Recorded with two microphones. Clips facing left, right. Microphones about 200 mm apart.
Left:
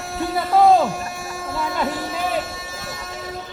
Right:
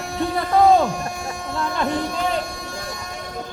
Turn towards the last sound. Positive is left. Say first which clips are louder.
# even
turn(degrees=5)  # may be behind; listen again after turning